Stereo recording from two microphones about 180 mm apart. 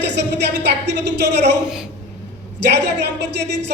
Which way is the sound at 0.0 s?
75° right (ahead or behind).